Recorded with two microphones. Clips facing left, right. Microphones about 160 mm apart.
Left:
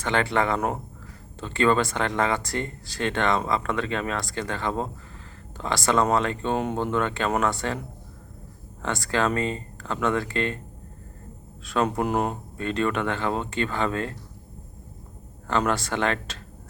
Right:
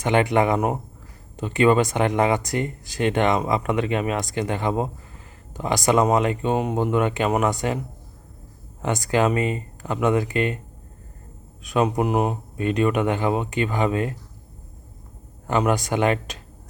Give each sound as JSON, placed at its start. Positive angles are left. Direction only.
{"t": 0.0, "sound": "speech", "side_deg": -15}
{"t": 8.8, "sound": "speech", "side_deg": -15}
{"t": 11.6, "sound": "speech", "side_deg": -15}
{"t": 11.9, "sound": "speech", "side_deg": -5}
{"t": 15.4, "sound": "speech", "side_deg": -15}